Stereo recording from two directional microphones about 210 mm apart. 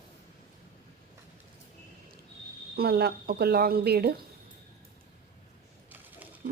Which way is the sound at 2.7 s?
50° right (ahead or behind).